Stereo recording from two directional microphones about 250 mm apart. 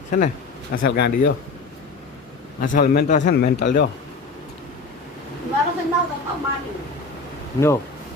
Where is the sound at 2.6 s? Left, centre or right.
Left.